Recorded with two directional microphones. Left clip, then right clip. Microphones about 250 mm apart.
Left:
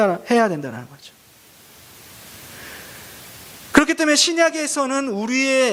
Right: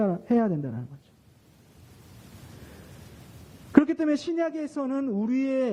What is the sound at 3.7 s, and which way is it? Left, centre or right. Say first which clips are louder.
Speech: left 7 dB; centre.